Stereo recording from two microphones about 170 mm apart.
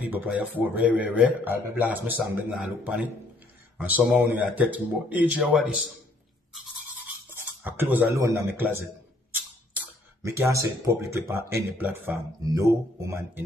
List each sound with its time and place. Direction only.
0.0 s a man's voice: 10° right (ahead or behind)
7.6 s a man's voice: 10° right (ahead or behind)